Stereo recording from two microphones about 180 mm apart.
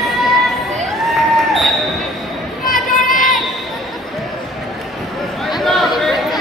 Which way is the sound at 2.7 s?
50° left (ahead or behind).